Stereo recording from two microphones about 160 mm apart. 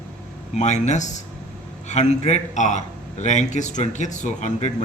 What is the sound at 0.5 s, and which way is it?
A man's voice, 45° left (ahead or behind).